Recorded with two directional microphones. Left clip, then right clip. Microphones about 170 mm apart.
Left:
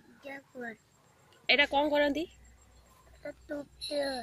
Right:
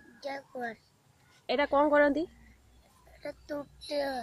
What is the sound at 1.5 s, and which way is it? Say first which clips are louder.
Speech: even; 20° right (ahead or behind).